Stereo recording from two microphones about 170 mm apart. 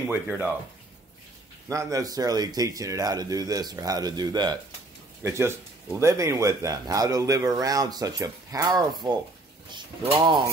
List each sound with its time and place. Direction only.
0.1 s speech: 10° right (ahead or behind)
1.7 s speech: 20° right (ahead or behind)